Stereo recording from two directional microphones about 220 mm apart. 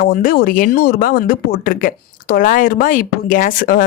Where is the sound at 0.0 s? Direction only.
40° left (ahead or behind).